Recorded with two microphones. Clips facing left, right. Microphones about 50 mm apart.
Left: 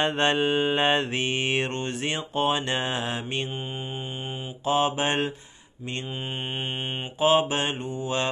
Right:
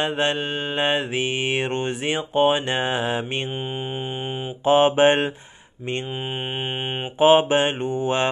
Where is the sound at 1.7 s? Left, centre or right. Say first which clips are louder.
Right 5 dB; centre.